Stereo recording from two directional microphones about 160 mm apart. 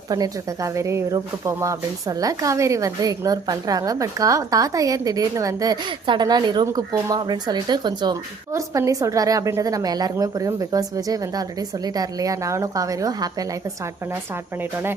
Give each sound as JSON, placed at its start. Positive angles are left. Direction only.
{"t": 0.1, "sound": "speech", "side_deg": -20}
{"t": 14.6, "sound": "speech", "side_deg": -15}